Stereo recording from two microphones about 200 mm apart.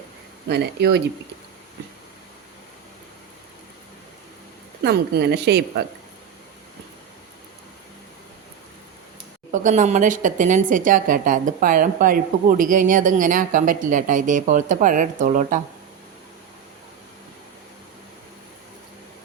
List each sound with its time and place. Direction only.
0.4 s a woman's voice: 55° right (ahead or behind)
4.8 s a woman's voice: 55° right (ahead or behind)
9.5 s a woman's voice: 40° right (ahead or behind)